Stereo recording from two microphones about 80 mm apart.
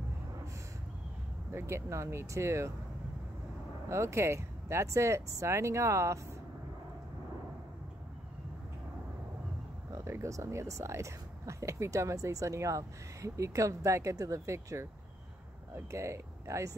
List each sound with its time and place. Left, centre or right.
1.5 s speech: right
3.9 s speech: right
9.9 s speech: right